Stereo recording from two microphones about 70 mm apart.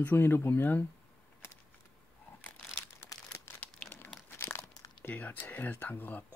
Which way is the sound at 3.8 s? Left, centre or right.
Centre.